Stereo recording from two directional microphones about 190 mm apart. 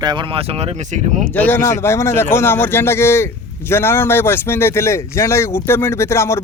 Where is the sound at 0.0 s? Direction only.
25° right (ahead or behind); by 1.2 s 40° right (ahead or behind).